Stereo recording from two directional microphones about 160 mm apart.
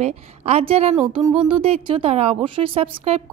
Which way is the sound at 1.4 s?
35° right (ahead or behind).